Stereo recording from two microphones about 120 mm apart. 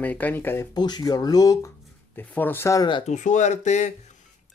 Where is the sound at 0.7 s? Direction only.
35° left (ahead or behind).